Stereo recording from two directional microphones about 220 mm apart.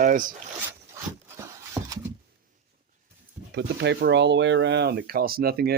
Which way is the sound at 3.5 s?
50° right (ahead or behind).